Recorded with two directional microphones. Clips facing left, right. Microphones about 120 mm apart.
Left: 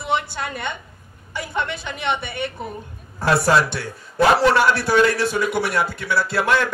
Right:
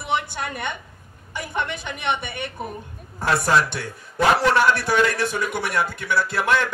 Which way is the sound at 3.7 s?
20° right (ahead or behind).